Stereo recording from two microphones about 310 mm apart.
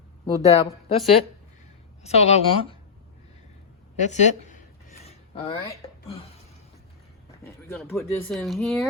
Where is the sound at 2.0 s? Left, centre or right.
Centre.